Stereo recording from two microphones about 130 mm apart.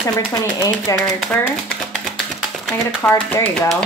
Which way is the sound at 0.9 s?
25° left (ahead or behind).